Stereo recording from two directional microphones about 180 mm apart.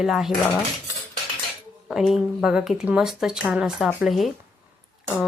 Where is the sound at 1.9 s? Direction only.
Centre (ahead or behind).